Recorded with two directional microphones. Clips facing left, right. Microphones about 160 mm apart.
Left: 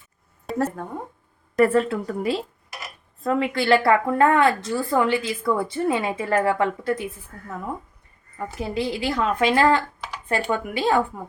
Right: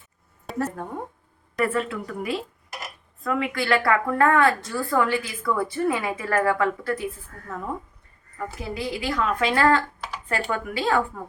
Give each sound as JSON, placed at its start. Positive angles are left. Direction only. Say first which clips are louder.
{"t": 0.5, "sound": "a sound", "louder": "left 3 dB", "side_deg": 0}
{"t": 1.5, "sound": "a woman's voice", "louder": "left 6 dB", "side_deg": 35}
{"t": 7.4, "sound": "speech", "louder": "even", "side_deg": 10}
{"t": 8.4, "sound": "a woman's voice", "louder": "left 4 dB", "side_deg": 25}